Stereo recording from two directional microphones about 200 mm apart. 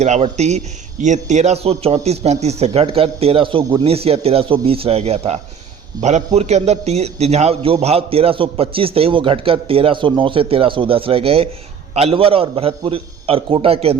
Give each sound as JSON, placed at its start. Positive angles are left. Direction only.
{"t": 0.0, "sound": "a man's voice", "side_deg": -35}